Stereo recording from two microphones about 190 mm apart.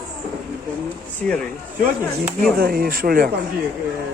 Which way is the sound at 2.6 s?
50° right (ahead or behind).